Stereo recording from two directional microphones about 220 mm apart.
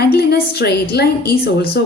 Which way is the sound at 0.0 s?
45° left (ahead or behind).